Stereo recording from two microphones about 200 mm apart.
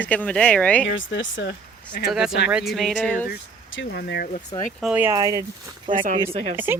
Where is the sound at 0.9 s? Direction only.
65° left (ahead or behind).